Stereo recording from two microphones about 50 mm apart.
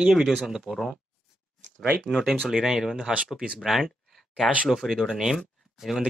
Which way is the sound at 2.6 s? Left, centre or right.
Centre.